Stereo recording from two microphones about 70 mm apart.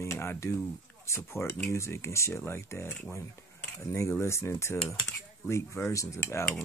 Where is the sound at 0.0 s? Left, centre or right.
Left.